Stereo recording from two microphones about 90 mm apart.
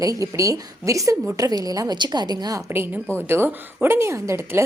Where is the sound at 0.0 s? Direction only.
40° right (ahead or behind).